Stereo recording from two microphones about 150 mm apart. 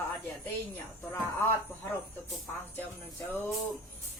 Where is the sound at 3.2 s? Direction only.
15° left (ahead or behind).